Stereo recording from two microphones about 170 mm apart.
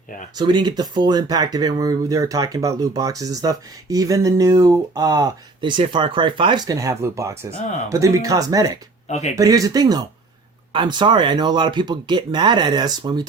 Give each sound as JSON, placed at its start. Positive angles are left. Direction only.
{"t": 0.3, "sound": "speech", "side_deg": -25}